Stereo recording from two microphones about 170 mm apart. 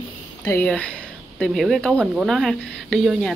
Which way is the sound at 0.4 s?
10° left (ahead or behind).